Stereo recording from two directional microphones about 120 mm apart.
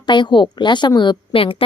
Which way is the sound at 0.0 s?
40° left (ahead or behind).